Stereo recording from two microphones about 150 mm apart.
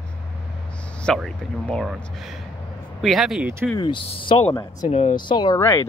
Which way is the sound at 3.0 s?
Centre (ahead or behind).